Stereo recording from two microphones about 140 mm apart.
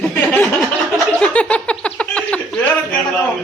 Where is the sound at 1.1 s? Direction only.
10° left (ahead or behind).